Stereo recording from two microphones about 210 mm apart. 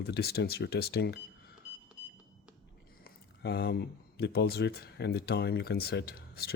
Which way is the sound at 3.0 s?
50° left (ahead or behind).